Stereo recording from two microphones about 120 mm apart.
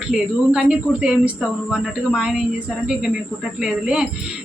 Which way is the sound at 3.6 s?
5° right (ahead or behind).